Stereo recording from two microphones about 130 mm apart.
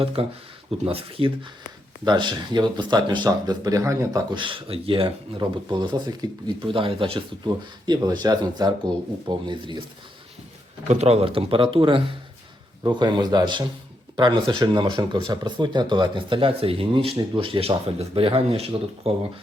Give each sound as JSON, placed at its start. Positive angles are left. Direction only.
{"t": 0.2, "sound": "speech", "side_deg": -45}
{"t": 4.4, "sound": "speech", "side_deg": -40}
{"t": 10.8, "sound": "speech", "side_deg": -55}